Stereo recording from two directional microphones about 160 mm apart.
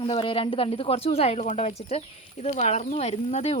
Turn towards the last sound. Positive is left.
turn(degrees=40)  # may be behind; listen again after turning